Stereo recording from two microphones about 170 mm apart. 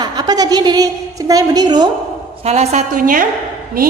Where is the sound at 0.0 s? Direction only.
25° right (ahead or behind).